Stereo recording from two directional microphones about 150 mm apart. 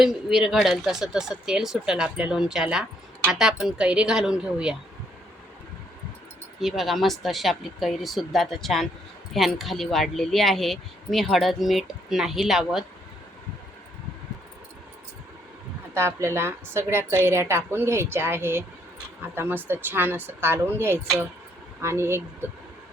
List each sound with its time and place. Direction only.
0.0 s speech: centre (ahead or behind)
6.6 s speech: centre (ahead or behind)
16.0 s speech: 20° right (ahead or behind)